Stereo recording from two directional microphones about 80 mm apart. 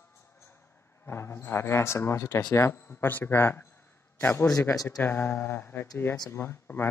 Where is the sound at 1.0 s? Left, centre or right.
Left.